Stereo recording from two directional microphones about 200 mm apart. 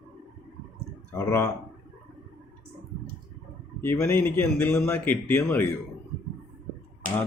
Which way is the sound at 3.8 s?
10° left (ahead or behind).